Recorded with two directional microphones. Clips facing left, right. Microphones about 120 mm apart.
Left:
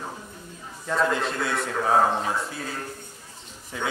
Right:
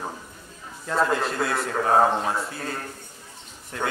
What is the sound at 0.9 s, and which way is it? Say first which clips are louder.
A man's voice: right 1 dB; centre (ahead or behind).